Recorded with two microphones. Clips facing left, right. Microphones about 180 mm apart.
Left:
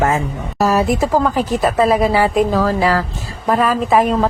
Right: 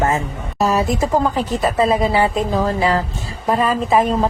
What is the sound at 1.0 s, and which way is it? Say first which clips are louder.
A woman's voice: left 2 dB; centre (ahead or behind).